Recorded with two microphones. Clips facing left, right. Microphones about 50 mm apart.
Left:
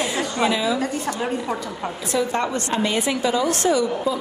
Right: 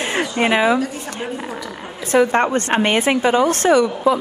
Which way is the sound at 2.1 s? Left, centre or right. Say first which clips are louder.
Right 8 dB; right.